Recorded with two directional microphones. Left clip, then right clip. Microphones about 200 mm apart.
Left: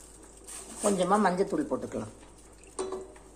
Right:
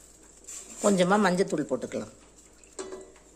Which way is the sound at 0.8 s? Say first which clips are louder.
Right 2 dB; 35° right (ahead or behind).